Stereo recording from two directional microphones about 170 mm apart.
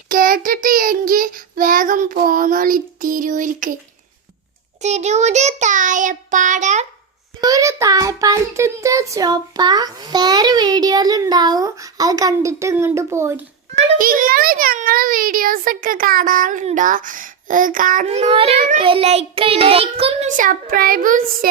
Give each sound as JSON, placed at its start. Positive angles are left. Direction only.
{"t": 0.1, "sound": "a child's voice", "side_deg": -55}
{"t": 4.8, "sound": "a child's voice", "side_deg": -40}
{"t": 7.4, "sound": "child singing", "side_deg": -20}
{"t": 14.0, "sound": "a child's voice", "side_deg": -60}
{"t": 20.3, "sound": "a child's voice", "side_deg": -50}